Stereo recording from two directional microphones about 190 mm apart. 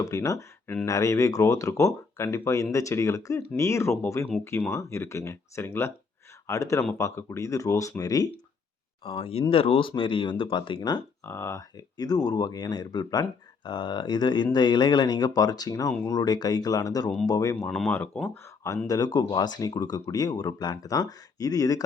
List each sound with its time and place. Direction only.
0.0 s speech: 15° left (ahead or behind)
17.7 s speech: 5° left (ahead or behind)
18.9 s speech: 20° left (ahead or behind)